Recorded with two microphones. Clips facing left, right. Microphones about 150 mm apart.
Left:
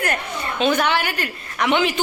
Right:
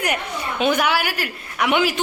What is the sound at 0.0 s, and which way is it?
A woman's voice, 10° right (ahead or behind).